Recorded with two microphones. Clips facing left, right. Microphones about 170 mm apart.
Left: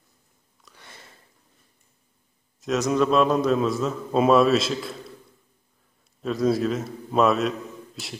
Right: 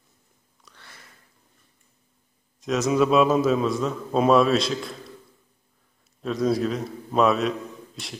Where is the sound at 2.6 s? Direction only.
Centre (ahead or behind).